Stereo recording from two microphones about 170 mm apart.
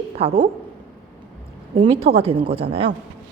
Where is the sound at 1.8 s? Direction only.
35° right (ahead or behind).